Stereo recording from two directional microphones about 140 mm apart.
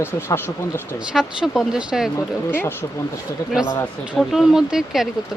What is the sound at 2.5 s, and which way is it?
Speech, 15° left (ahead or behind).